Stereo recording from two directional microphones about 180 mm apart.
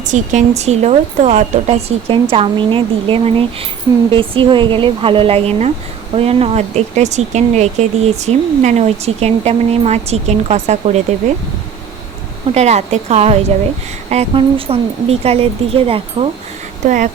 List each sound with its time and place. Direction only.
0.0 s a woman's voice: 45° right (ahead or behind)
12.5 s speech: 40° right (ahead or behind)
16.8 s speech: 45° right (ahead or behind)